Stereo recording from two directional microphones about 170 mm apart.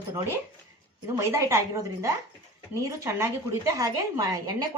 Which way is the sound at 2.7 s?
20° right (ahead or behind).